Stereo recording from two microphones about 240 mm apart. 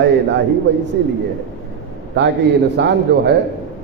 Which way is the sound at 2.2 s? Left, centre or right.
Right.